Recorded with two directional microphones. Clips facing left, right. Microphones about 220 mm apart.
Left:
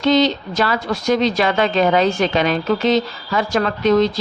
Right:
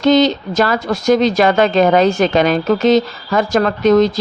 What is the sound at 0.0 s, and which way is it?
Speech, 45° right (ahead or behind).